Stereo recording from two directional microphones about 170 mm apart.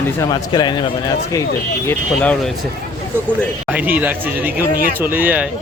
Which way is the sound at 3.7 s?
10° right (ahead or behind).